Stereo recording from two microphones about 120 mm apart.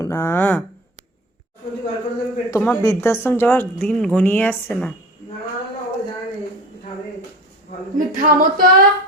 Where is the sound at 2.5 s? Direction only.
20° left (ahead or behind).